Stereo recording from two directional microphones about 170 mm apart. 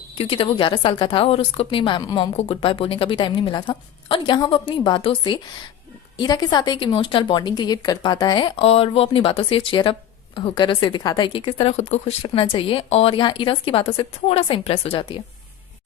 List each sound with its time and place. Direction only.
0.2 s a woman's voice: 35° left (ahead or behind)